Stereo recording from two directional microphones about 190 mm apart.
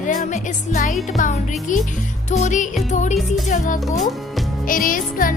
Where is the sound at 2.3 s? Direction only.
40° left (ahead or behind).